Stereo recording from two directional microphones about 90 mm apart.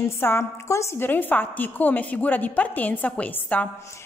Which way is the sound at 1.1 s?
20° left (ahead or behind).